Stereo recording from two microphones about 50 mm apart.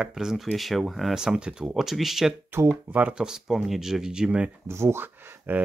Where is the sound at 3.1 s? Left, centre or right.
Centre.